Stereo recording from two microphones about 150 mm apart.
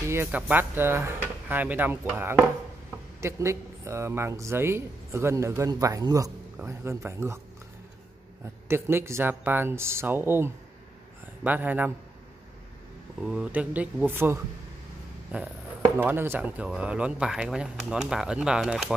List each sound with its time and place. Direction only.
0.1 s speech: 15° right (ahead or behind)
8.6 s speech: 15° right (ahead or behind)
13.2 s speech: 5° right (ahead or behind)
16.0 s speech: 15° right (ahead or behind)